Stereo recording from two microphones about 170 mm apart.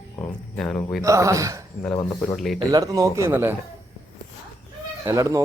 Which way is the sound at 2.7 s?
20° right (ahead or behind).